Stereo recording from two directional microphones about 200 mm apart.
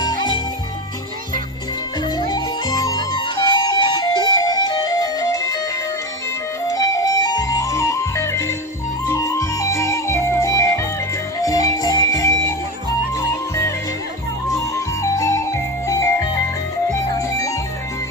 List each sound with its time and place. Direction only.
0.0 s music: 20° left (ahead or behind)
2.1 s music: 20° left (ahead or behind)
6.7 s music: 15° left (ahead or behind)
15.0 s music: 15° left (ahead or behind)
17.2 s music: 15° left (ahead or behind)